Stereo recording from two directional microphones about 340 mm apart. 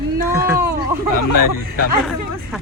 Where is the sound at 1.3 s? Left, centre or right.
Left.